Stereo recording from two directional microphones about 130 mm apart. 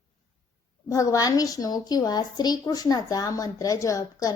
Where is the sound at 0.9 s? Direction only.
25° left (ahead or behind).